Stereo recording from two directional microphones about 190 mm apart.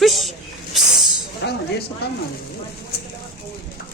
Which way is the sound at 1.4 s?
65° left (ahead or behind).